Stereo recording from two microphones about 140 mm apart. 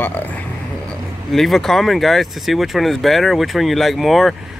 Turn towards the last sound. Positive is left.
turn(degrees=0)  # may be behind; listen again after turning